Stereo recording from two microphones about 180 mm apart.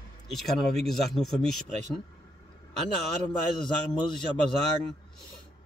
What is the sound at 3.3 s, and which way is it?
Speech, 25° left (ahead or behind).